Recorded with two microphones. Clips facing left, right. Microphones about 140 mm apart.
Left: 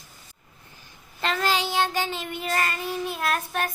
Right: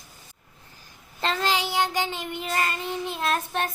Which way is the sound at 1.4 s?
15° right (ahead or behind).